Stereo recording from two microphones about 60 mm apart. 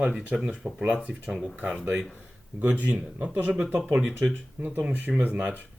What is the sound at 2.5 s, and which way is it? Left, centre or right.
Speech, right.